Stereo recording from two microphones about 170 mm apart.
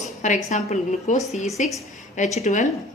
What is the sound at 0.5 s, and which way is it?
A woman's voice, 40° left (ahead or behind).